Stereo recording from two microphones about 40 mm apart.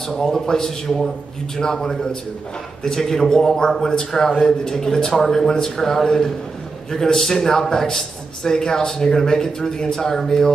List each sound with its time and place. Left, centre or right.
0.1 s a man's voice: centre